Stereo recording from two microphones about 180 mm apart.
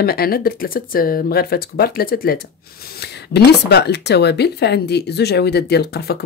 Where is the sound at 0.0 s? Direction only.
55° left (ahead or behind).